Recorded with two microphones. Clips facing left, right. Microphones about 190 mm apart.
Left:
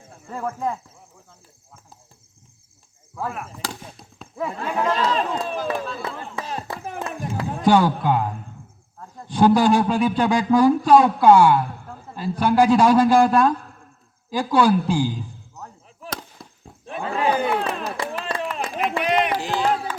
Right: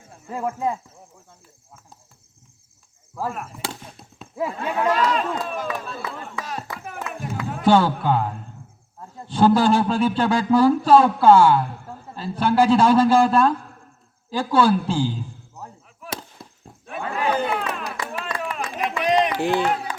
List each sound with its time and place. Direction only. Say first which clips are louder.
0.3 s speech: right 2 dB; 5° right (ahead or behind)
3.2 s speech: right 1 dB; centre (ahead or behind)
4.9 s speech: even; 30° left (ahead or behind)
6.0 s a sound: left 1 dB; 30° left (ahead or behind)
7.6 s speech: even; 15° left (ahead or behind)
16.0 s fireworks: even; centre (ahead or behind)
17.0 s a sound: left 2 dB; 30° left (ahead or behind)
17.6 s clapping: left 3 dB; 30° left (ahead or behind)
18.5 s a sound: left 2 dB; 35° left (ahead or behind)
19.4 s speech: right 4 dB; 55° right (ahead or behind)